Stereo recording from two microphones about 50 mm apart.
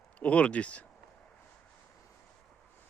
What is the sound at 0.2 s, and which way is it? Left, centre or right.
Speech, left.